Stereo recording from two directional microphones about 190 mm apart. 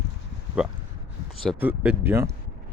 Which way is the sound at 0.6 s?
5° right (ahead or behind).